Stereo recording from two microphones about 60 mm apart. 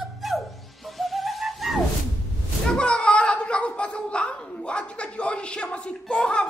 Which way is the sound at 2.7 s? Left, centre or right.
Centre.